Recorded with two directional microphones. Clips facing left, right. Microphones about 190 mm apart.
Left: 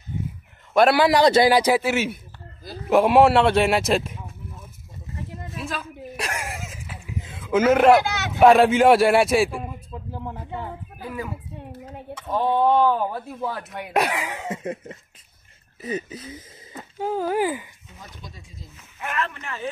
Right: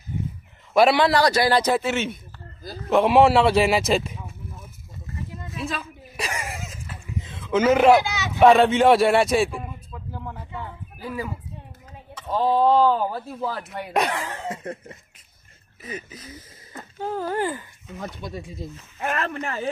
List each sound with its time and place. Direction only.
0.7 s speech: centre (ahead or behind)
1.0 s speech: 20° left (ahead or behind); by 4.3 s centre (ahead or behind)
5.6 s a sound: centre (ahead or behind)
8.0 s speech: 55° left (ahead or behind)
8.4 s speech: 5° left (ahead or behind)
9.9 s a sound: 25° left (ahead or behind)
12.4 s speech: 5° right (ahead or behind); by 15.0 s 20° left (ahead or behind)
15.8 s speech: 35° left (ahead or behind)
16.7 s speech: 10° left (ahead or behind)
17.9 s speech: 65° right (ahead or behind)
18.9 s speech: 40° right (ahead or behind)